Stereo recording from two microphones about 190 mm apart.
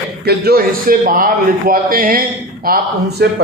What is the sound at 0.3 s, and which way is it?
A man's voice, 55° right (ahead or behind).